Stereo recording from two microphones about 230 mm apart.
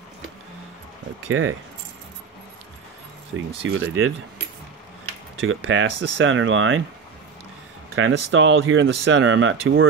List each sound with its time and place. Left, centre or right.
1.3 s speech: right
3.3 s speech: right
5.5 s speech: right
7.9 s speech: right